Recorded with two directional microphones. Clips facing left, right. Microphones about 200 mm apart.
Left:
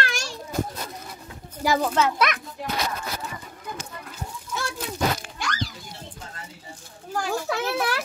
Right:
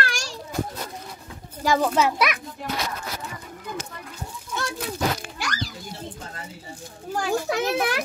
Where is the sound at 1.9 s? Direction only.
10° right (ahead or behind).